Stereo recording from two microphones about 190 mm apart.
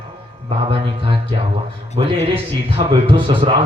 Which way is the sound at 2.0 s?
30° right (ahead or behind).